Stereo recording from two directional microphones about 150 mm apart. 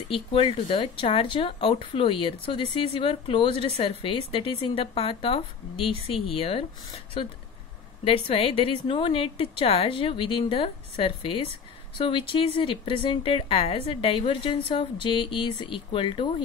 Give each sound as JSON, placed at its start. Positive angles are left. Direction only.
{"t": 0.1, "sound": "speech", "side_deg": 35}